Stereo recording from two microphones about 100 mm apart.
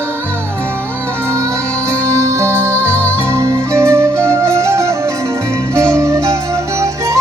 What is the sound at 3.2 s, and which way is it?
Music, 30° right (ahead or behind).